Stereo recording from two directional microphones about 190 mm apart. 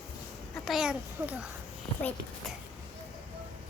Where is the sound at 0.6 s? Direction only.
5° right (ahead or behind).